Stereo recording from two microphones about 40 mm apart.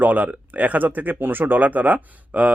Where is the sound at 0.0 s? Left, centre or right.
Right.